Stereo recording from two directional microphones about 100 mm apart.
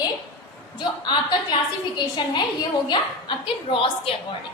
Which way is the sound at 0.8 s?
50° left (ahead or behind).